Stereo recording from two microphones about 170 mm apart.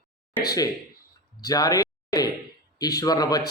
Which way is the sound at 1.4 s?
20° left (ahead or behind).